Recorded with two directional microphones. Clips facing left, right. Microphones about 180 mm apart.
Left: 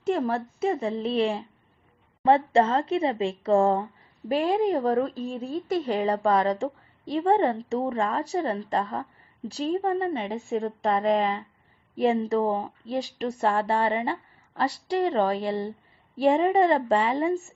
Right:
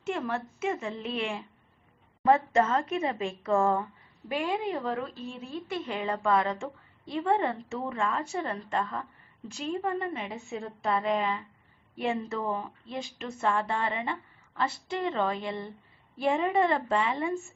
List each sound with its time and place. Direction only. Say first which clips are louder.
0.0 s a woman's voice: left 6 dB; 35° left (ahead or behind)
10.5 s a woman's voice: left 5 dB; 45° left (ahead or behind)